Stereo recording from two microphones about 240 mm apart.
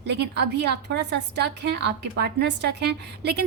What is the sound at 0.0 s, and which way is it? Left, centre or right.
A woman's voice, right.